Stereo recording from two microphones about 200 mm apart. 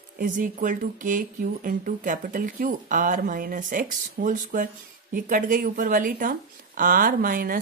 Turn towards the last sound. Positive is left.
turn(degrees=-45)  # may be behind; listen again after turning